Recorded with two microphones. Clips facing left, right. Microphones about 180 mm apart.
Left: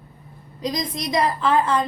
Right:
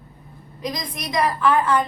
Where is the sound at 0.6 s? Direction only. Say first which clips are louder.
Left 3 dB; 25° left (ahead or behind).